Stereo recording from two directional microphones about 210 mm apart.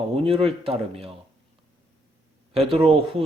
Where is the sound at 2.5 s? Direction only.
30° right (ahead or behind).